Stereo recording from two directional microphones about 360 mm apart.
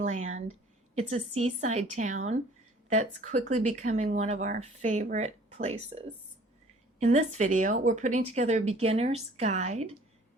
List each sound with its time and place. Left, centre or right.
0.0 s a woman's voice: centre
7.0 s speech: centre